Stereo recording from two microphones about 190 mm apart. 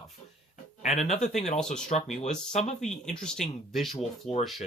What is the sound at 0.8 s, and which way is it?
Speech, 35° left (ahead or behind).